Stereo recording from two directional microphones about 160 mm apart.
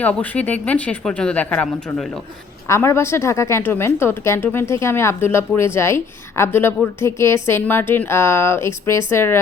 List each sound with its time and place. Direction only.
0.0 s speech: 10° left (ahead or behind)
2.6 s speech: 15° left (ahead or behind)